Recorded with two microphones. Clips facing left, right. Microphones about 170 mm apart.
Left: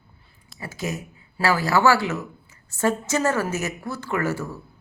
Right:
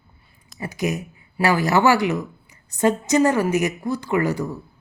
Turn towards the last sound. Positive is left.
turn(degrees=-15)  # may be behind; listen again after turning